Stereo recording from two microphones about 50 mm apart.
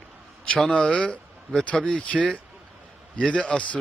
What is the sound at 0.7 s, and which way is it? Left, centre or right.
A man's voice, left.